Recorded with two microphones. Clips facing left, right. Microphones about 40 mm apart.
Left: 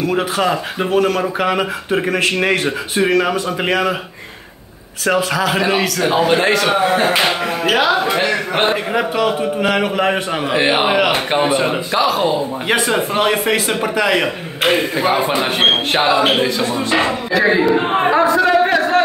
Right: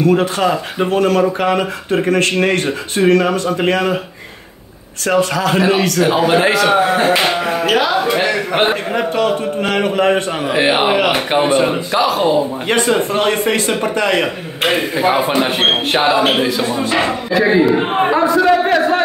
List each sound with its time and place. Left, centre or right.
0.0 s a man's voice: centre
5.0 s a man's voice: centre
7.7 s speech: centre
8.2 s a man's voice: centre
8.9 s a man's voice: centre
17.4 s a man's voice: centre
18.1 s speech: centre
18.4 s a sound: centre